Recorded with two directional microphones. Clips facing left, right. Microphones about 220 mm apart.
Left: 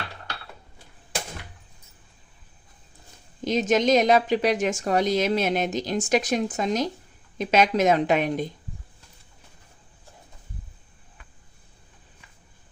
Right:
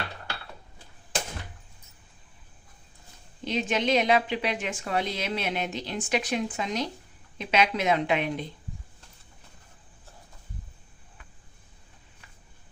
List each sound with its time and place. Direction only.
3.4 s speech: 40° left (ahead or behind)